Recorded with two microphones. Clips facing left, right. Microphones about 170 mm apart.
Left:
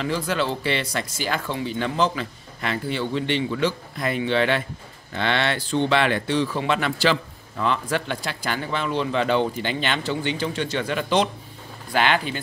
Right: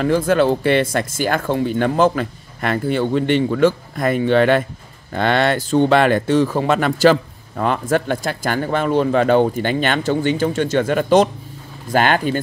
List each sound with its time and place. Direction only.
0.0 s speech: 50° right (ahead or behind)